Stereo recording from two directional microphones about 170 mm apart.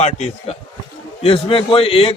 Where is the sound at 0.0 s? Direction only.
40° left (ahead or behind).